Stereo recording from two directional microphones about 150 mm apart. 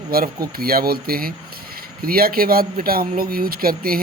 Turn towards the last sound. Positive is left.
turn(degrees=-75)  # may be behind; listen again after turning